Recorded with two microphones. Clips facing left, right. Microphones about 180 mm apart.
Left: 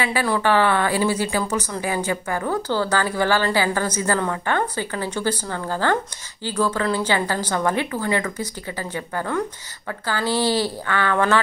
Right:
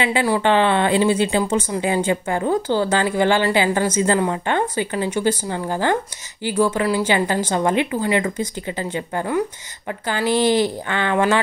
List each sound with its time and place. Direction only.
0.0 s speech: 20° right (ahead or behind)